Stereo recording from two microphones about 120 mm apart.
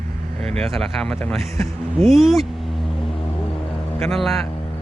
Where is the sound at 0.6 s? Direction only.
5° left (ahead or behind).